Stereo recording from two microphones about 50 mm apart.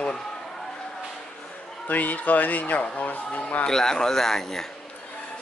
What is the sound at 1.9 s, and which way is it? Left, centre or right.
A man's voice, left.